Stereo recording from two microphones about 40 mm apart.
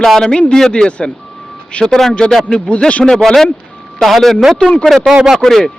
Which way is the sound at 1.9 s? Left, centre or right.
Centre.